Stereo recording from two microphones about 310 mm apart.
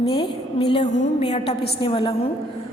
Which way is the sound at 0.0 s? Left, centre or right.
Centre.